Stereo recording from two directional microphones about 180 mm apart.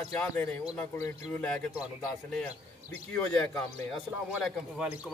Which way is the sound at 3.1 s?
5° left (ahead or behind).